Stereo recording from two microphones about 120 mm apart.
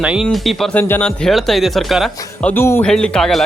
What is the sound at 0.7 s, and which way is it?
Speech, 15° left (ahead or behind).